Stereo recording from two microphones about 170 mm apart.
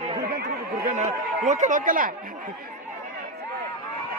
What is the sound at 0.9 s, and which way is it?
Speech, 40° right (ahead or behind).